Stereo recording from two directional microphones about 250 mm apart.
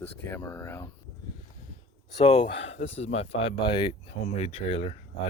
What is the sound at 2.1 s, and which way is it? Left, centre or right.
Speech, left.